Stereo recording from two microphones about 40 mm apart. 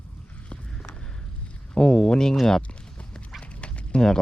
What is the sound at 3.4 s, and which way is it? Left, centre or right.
Dog, left.